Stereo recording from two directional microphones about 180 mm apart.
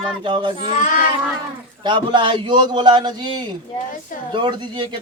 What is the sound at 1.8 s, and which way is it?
A man's voice, 25° right (ahead or behind).